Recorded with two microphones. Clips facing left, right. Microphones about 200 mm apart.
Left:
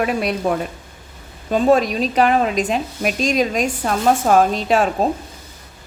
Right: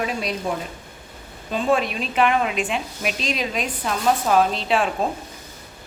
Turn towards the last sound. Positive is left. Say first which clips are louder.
# left 4 dB
turn(degrees=40)  # may be behind; listen again after turning